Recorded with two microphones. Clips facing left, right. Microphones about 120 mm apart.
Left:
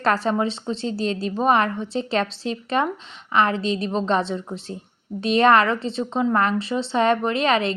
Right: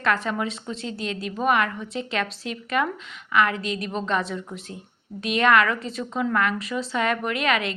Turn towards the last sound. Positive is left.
turn(degrees=30)  # may be behind; listen again after turning